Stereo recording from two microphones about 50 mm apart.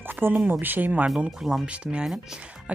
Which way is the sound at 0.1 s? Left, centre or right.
Right.